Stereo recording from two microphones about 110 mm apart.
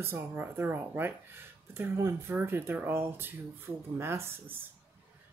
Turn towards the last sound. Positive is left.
turn(degrees=-20)  # may be behind; listen again after turning